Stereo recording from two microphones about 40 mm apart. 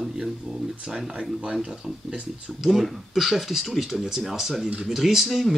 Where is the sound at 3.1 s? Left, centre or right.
Centre.